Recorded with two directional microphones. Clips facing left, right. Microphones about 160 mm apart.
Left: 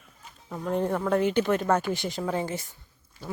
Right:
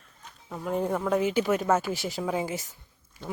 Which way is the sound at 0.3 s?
Centre (ahead or behind).